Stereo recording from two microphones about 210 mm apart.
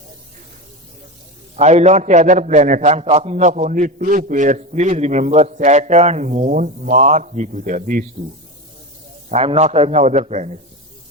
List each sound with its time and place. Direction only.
1.5 s a man's voice: 30° right (ahead or behind)
9.3 s a man's voice: 30° right (ahead or behind)